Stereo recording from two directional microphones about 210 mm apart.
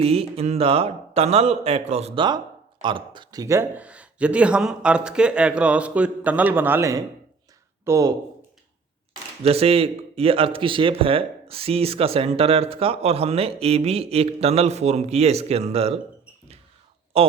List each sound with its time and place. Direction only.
0.0 s speech: 30° right (ahead or behind)
9.4 s speech: 30° right (ahead or behind)
17.1 s speech: 30° right (ahead or behind)